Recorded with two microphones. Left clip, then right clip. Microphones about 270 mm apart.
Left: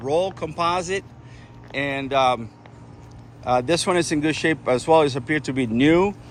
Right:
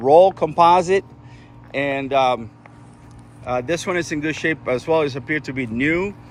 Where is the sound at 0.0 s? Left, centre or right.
Centre.